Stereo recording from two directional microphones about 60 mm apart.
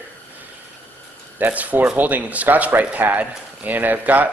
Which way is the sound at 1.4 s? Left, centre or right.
Right.